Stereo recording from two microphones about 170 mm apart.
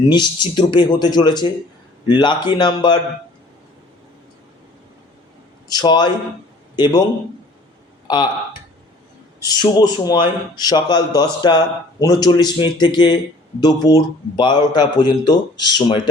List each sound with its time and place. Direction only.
0.1 s speech: 25° left (ahead or behind)
5.6 s a man's voice: 25° left (ahead or behind)
8.0 s speech: 25° left (ahead or behind)
9.4 s speech: 25° left (ahead or behind)